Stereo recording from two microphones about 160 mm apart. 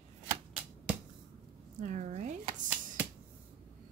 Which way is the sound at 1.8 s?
50° right (ahead or behind).